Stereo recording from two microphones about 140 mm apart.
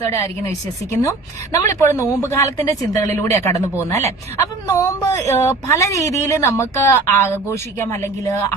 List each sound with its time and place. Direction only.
0.0 s speech: 20° left (ahead or behind)